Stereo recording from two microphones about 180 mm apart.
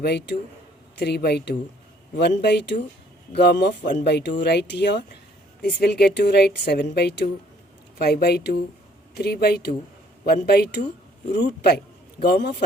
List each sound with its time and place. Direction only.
0.0 s speech: 70° left (ahead or behind)